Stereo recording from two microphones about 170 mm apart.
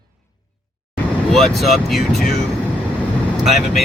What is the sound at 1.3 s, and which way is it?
Speech, centre (ahead or behind).